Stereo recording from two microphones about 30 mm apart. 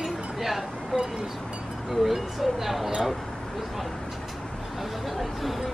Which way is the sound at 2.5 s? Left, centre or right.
Centre.